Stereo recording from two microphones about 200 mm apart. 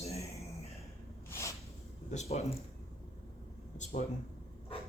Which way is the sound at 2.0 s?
35° left (ahead or behind).